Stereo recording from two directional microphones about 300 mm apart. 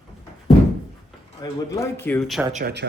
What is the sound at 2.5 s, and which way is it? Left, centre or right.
Speech, right.